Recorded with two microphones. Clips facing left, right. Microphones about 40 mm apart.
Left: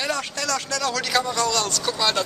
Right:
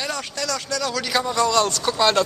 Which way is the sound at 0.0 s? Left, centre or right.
Centre.